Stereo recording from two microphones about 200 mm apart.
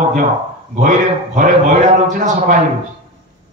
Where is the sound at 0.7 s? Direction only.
40° right (ahead or behind).